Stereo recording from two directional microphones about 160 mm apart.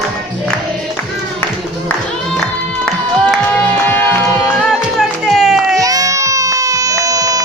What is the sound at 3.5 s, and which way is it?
Music, 10° left (ahead or behind).